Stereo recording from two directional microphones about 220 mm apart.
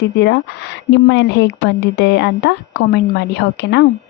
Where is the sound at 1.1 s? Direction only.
50° left (ahead or behind).